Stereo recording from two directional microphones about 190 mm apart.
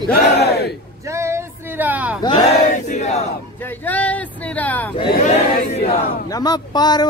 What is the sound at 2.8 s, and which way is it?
Speech, 35° left (ahead or behind).